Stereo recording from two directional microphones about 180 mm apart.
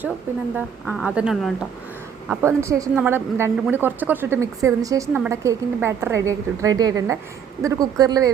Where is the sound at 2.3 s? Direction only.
15° right (ahead or behind).